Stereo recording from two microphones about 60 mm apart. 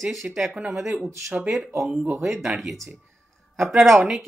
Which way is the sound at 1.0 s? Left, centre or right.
Right.